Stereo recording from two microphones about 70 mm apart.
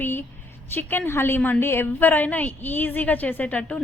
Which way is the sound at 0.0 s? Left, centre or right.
Left.